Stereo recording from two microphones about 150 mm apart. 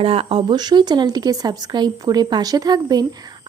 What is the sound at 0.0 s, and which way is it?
Speech, 40° right (ahead or behind).